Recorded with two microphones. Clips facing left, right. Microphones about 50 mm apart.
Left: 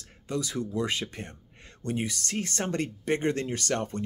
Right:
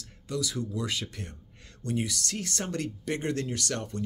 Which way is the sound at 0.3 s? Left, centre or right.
Left.